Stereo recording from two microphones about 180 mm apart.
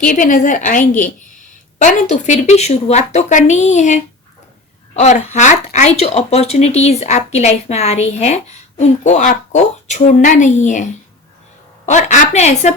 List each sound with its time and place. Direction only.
0.0 s a woman's voice: 50° left (ahead or behind)
11.9 s speech: 40° left (ahead or behind)